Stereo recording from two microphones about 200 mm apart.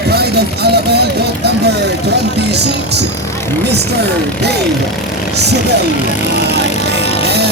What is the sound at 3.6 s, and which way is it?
Speech, 55° right (ahead or behind).